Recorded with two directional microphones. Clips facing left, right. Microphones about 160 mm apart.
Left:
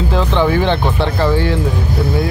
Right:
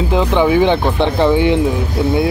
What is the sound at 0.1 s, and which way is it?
Speech, 15° right (ahead or behind).